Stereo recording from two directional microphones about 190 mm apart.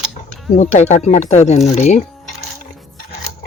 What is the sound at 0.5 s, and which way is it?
Speech, 35° left (ahead or behind).